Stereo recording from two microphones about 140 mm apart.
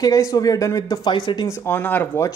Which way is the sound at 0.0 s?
25° left (ahead or behind).